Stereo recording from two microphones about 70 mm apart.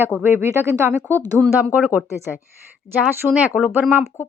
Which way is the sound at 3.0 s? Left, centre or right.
Centre.